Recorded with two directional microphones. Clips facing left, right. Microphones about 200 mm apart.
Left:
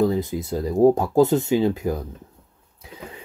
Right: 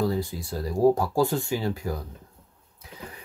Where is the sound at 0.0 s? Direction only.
20° left (ahead or behind).